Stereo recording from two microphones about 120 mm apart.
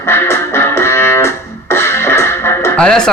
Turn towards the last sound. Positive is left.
turn(degrees=5)  # may be behind; listen again after turning